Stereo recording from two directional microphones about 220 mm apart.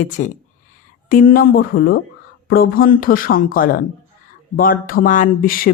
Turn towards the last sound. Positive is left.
turn(degrees=40)  # may be behind; listen again after turning